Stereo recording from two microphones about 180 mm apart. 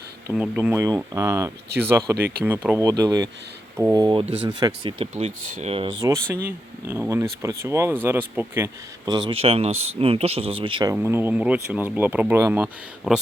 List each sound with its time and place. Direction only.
0.3 s speech: 10° right (ahead or behind); by 5.9 s 35° right (ahead or behind)
6.0 s speech: 20° right (ahead or behind)
10.9 s speech: 10° right (ahead or behind)